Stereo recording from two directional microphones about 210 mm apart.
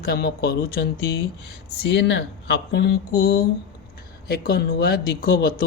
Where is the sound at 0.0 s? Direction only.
50° left (ahead or behind).